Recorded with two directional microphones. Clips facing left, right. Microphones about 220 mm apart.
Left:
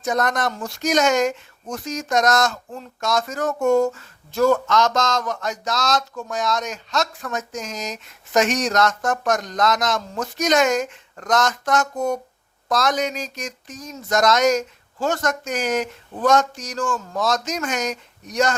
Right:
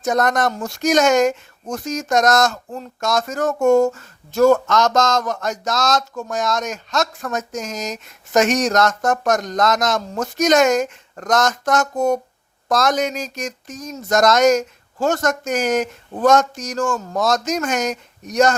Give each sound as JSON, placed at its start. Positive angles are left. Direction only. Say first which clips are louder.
{"t": 0.0, "sound": "speech", "louder": "right 4 dB", "side_deg": -45}